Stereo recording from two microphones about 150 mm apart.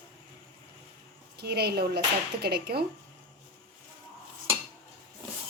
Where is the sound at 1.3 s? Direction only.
90° right.